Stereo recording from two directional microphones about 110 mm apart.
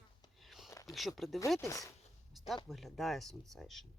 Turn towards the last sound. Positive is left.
turn(degrees=5)  # may be behind; listen again after turning